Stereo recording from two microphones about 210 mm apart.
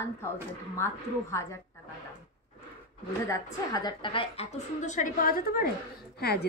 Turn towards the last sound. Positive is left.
turn(degrees=50)  # may be behind; listen again after turning